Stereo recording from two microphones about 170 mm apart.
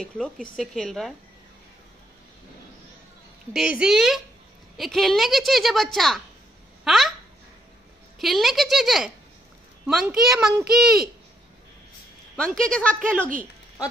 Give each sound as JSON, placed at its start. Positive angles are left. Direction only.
{"t": 0.6, "sound": "a woman's voice", "side_deg": 0}
{"t": 3.5, "sound": "a woman's voice", "side_deg": -5}
{"t": 8.2, "sound": "a woman's voice", "side_deg": 0}
{"t": 12.4, "sound": "a woman's voice", "side_deg": 5}